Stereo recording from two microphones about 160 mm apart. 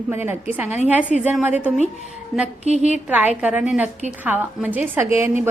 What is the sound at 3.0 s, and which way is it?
A woman's voice, 10° right (ahead or behind).